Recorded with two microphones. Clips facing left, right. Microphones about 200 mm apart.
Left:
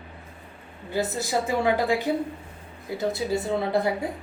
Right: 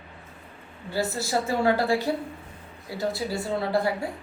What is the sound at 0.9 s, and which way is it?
A woman's voice, 20° left (ahead or behind).